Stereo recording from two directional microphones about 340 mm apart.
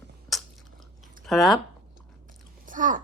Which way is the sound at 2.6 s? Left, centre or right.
Right.